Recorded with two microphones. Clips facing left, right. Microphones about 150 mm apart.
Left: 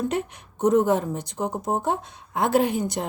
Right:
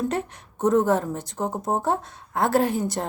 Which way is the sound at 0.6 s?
20° left (ahead or behind).